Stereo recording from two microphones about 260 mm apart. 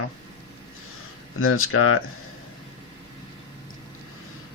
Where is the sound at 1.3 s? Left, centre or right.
Left.